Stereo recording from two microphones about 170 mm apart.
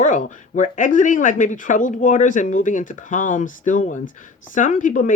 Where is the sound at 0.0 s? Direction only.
45° left (ahead or behind).